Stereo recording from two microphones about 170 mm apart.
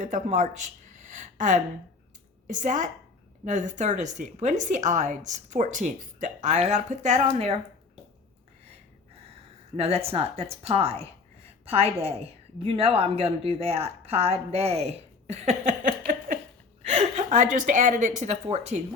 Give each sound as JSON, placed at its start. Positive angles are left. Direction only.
{"t": 0.0, "sound": "a woman's voice", "side_deg": -50}
{"t": 9.7, "sound": "a woman's voice", "side_deg": -35}
{"t": 16.9, "sound": "a woman's voice", "side_deg": -40}